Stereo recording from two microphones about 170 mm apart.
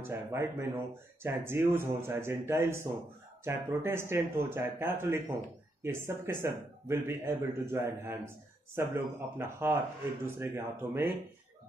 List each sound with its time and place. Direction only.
0.0 s speech: 15° right (ahead or behind)